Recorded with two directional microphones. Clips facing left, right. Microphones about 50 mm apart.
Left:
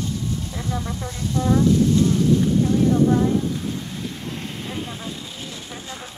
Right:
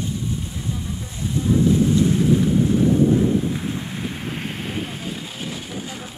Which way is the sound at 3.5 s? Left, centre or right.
Right.